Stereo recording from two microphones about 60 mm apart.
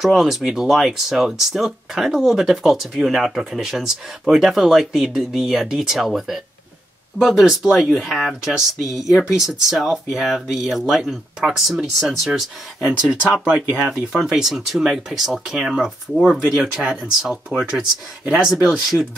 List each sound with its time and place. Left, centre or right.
0.0 s speech: centre
13.5 s speech: right
13.8 s speech: centre